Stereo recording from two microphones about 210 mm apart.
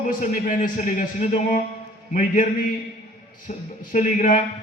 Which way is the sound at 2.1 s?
40° left (ahead or behind).